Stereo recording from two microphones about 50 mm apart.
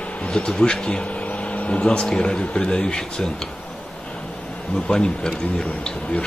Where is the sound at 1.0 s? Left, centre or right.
Left.